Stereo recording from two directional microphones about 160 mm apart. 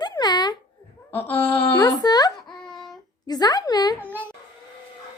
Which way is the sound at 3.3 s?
25° left (ahead or behind).